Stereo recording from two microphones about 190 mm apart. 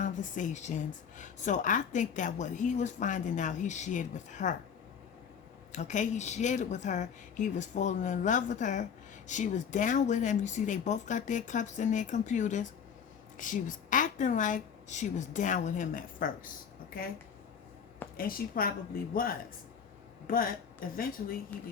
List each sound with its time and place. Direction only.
0.0 s a woman's voice: 40° left (ahead or behind)
5.7 s a woman's voice: 40° left (ahead or behind)
18.2 s a woman's voice: 50° left (ahead or behind)